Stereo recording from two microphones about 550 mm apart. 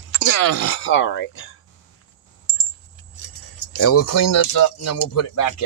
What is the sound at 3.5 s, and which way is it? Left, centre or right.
Speech, left.